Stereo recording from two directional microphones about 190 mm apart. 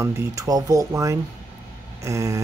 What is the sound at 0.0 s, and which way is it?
Speech, 15° right (ahead or behind).